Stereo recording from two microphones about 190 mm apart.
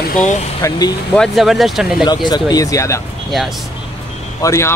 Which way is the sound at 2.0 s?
20° left (ahead or behind).